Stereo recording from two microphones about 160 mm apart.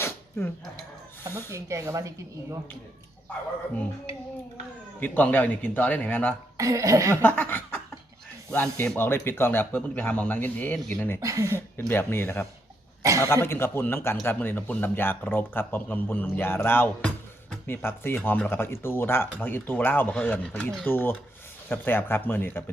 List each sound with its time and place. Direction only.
0.0 s dog: 15° left (ahead or behind)
1.3 s speech: 15° left (ahead or behind)
1.5 s speech: 20° right (ahead or behind)
4.9 s speech: 10° left (ahead or behind)
6.6 s speech: 20° right (ahead or behind)
7.2 s speech: 10° left (ahead or behind)
11.2 s speech: 20° right (ahead or behind)
11.5 s speech: 15° left (ahead or behind)
13.0 s speech: 20° right (ahead or behind)
13.2 s speech: 15° left (ahead or behind)